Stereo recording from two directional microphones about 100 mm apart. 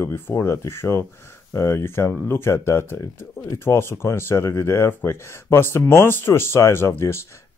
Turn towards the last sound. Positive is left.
turn(degrees=25)  # may be behind; listen again after turning